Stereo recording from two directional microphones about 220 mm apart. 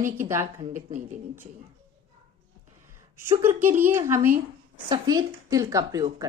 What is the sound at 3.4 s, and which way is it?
A woman's voice, 10° right (ahead or behind).